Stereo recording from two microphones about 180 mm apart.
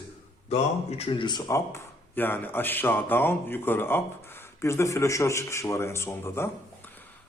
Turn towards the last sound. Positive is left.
turn(degrees=15)  # may be behind; listen again after turning